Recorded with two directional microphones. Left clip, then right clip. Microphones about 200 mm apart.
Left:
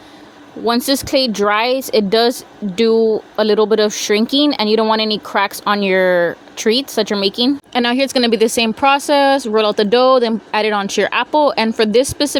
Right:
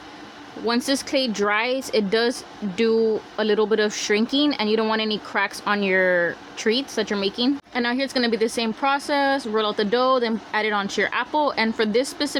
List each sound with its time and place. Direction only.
0.6 s speech: 20° left (ahead or behind)
7.7 s a woman's voice: 35° left (ahead or behind)